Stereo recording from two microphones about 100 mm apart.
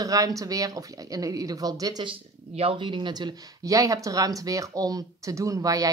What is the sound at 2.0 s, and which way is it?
Speech, 65° right (ahead or behind).